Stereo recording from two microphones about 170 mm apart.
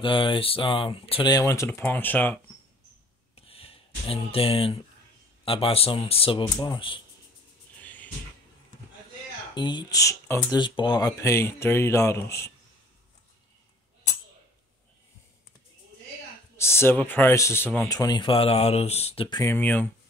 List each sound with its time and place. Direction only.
0.0 s speech: 30° left (ahead or behind); by 2.3 s 10° left (ahead or behind)
3.3 s a sound: 35° left (ahead or behind)
5.4 s speech: 35° left (ahead or behind)
7.8 s a sound: 10° left (ahead or behind)
9.6 s speech: 25° left (ahead or behind)
16.5 s speech: 15° left (ahead or behind); by 19.4 s 30° left (ahead or behind)
19.4 s speech: 10° left (ahead or behind)